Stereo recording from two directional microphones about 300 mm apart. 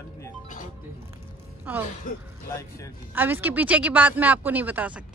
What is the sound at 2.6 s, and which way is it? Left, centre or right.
Speech, centre.